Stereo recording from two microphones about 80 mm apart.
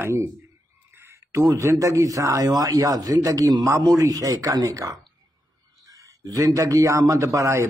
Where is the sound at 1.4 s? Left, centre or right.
Right.